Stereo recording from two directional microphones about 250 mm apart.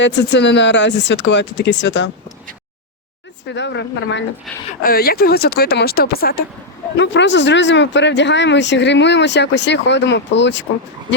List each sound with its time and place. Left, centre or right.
0.0 s speech: left
3.5 s speech: left